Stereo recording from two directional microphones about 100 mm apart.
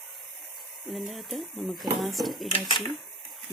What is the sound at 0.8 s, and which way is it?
Speech, centre (ahead or behind).